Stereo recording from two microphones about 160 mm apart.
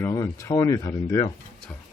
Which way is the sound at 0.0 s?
20° left (ahead or behind).